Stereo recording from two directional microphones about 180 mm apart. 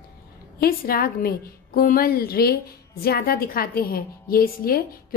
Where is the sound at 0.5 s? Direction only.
55° left (ahead or behind).